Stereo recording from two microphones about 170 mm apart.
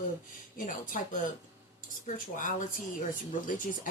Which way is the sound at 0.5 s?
55° left (ahead or behind).